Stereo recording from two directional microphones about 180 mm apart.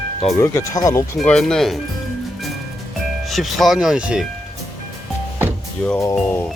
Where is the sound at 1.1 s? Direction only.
Centre (ahead or behind).